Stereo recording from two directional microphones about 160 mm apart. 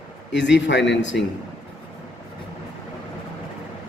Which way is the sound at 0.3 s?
90° left.